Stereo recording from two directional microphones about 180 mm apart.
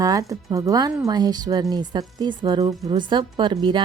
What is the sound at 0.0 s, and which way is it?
A woman's voice, 20° right (ahead or behind).